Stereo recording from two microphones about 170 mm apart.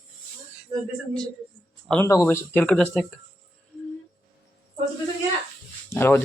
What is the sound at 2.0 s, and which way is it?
Speech, 15° left (ahead or behind).